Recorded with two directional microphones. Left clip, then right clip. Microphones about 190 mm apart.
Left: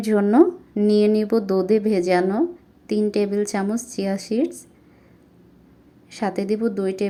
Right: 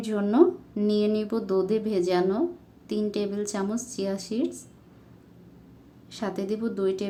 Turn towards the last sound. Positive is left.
turn(degrees=20)  # may be behind; listen again after turning